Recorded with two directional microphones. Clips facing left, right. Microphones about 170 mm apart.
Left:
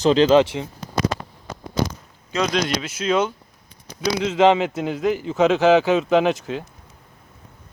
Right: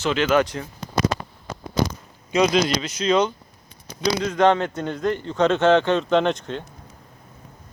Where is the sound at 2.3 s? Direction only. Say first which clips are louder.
Right 4 dB; 15° right (ahead or behind).